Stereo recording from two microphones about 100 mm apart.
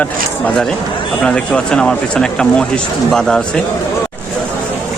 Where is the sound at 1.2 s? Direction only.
10° left (ahead or behind).